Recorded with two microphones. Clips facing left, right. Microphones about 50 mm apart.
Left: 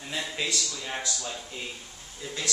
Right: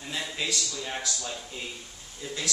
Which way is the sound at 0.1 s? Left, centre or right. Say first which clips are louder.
Left 1 dB; centre.